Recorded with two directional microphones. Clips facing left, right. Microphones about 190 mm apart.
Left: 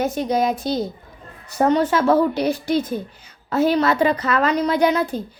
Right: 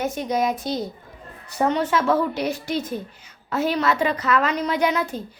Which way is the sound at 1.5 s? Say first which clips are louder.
Left 4 dB; 40° left (ahead or behind).